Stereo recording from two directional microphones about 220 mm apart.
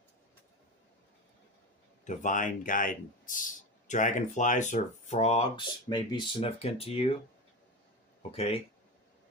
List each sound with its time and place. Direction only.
2.0 s speech: 35° left (ahead or behind)
8.3 s speech: 25° left (ahead or behind)